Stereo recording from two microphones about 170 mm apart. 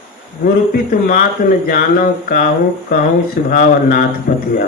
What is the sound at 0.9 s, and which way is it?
Speech, 55° left (ahead or behind).